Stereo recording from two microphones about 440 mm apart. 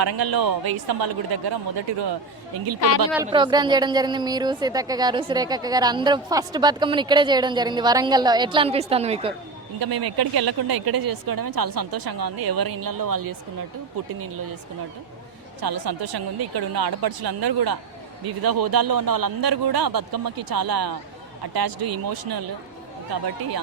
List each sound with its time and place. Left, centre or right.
0.0 s a man's voice: right
3.2 s a woman's voice: centre
9.8 s a woman's voice: right
15.6 s a woman's voice: right